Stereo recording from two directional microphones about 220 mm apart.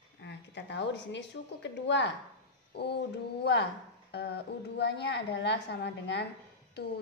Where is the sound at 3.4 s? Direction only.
50° left (ahead or behind).